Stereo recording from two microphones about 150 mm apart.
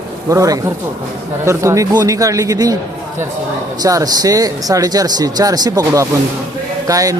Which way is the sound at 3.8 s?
25° right (ahead or behind).